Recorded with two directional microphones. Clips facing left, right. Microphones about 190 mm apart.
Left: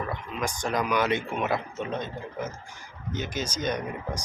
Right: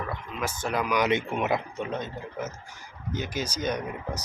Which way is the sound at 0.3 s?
5° right (ahead or behind).